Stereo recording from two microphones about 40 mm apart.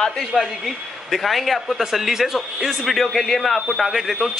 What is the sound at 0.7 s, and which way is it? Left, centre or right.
Speech, centre.